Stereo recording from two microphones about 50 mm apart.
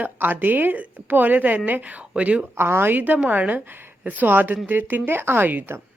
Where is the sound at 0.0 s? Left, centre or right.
Right.